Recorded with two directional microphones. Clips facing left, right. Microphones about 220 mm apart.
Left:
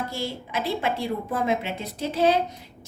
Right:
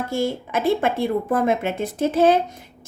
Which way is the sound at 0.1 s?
50° right (ahead or behind).